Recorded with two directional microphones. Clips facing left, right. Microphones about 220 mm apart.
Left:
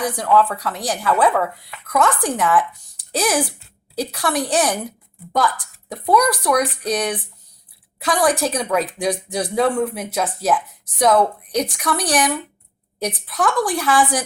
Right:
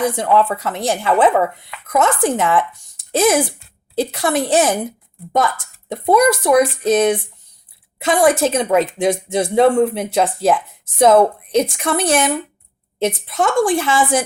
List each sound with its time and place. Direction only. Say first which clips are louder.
0.0 s speech: right 2 dB; 25° right (ahead or behind)